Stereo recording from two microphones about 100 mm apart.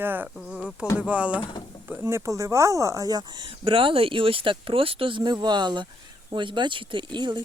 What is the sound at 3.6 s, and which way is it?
Speech, 65° right (ahead or behind).